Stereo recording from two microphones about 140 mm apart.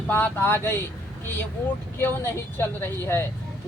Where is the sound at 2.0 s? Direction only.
15° left (ahead or behind).